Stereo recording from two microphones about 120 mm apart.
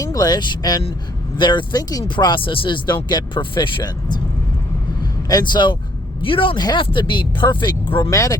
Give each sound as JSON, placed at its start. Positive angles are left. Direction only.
{"t": 0.0, "sound": "speech", "side_deg": 30}
{"t": 5.3, "sound": "speech", "side_deg": 35}
{"t": 8.1, "sound": "speech", "side_deg": 25}